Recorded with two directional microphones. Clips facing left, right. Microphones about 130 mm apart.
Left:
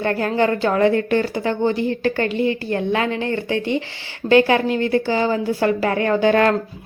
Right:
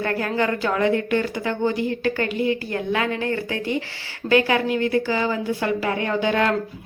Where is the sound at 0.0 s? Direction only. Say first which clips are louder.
Left 4 dB; 30° left (ahead or behind).